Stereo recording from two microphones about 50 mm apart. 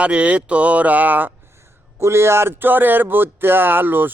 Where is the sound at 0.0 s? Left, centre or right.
Right.